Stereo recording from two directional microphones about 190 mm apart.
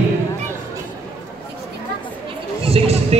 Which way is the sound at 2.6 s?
30° right (ahead or behind).